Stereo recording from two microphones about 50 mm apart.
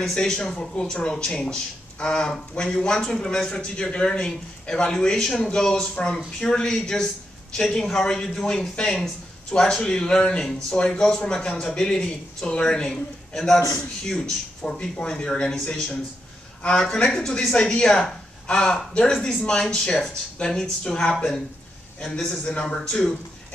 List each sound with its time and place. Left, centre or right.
0.0 s speech: centre